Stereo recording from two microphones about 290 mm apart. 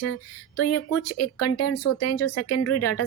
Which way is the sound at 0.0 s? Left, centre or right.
Left.